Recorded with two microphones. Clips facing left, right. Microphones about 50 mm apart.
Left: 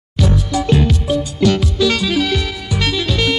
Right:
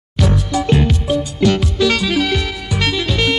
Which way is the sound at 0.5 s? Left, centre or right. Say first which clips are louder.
Even; right.